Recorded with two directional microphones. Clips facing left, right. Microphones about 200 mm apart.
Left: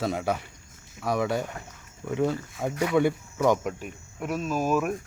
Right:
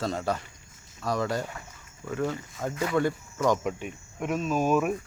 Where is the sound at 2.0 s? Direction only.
15° left (ahead or behind).